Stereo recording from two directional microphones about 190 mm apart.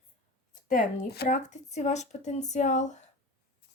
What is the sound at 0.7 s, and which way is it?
Speech, 50° left (ahead or behind).